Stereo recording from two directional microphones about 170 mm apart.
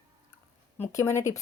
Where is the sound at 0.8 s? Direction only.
15° left (ahead or behind).